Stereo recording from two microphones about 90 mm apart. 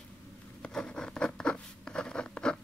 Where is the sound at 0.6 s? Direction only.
10° left (ahead or behind).